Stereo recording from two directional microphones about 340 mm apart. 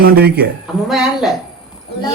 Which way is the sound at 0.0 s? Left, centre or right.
Right.